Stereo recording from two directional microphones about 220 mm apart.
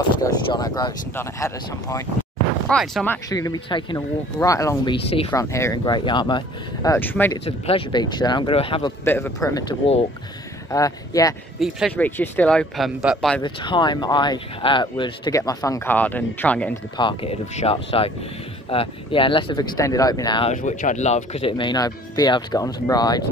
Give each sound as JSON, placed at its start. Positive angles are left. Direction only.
{"t": 0.2, "sound": "speech", "side_deg": 15}
{"t": 2.7, "sound": "speech", "side_deg": 0}
{"t": 3.3, "sound": "speech", "side_deg": 15}
{"t": 7.4, "sound": "speech", "side_deg": 25}
{"t": 9.0, "sound": "speech", "side_deg": 10}
{"t": 11.6, "sound": "speech", "side_deg": 5}
{"t": 13.4, "sound": "speech", "side_deg": 20}
{"t": 16.9, "sound": "speech", "side_deg": 25}
{"t": 20.5, "sound": "speech", "side_deg": 35}